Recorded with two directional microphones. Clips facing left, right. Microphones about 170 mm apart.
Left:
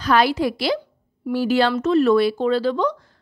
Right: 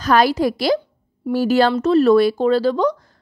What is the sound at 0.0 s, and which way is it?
A woman's voice, 40° right (ahead or behind).